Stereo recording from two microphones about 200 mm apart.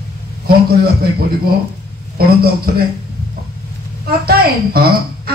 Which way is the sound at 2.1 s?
50° right (ahead or behind).